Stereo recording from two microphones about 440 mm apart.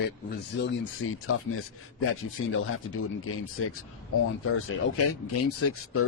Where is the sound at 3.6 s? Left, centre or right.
Left.